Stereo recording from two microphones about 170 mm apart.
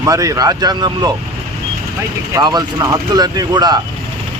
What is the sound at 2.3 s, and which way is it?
Speech, 25° right (ahead or behind).